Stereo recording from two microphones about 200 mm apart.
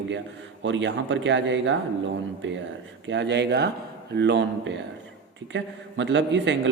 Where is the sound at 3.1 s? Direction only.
60° right (ahead or behind).